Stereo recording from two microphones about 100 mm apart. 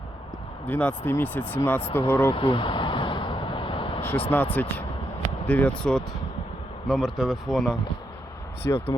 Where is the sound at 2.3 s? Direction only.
60° left (ahead or behind).